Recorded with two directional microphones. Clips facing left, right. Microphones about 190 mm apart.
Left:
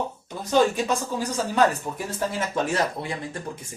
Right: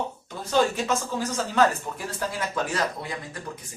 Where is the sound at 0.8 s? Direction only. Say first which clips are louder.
Left 1 dB; 15° left (ahead or behind).